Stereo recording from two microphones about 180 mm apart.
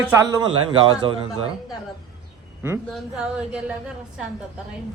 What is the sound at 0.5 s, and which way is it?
Speech, 30° right (ahead or behind).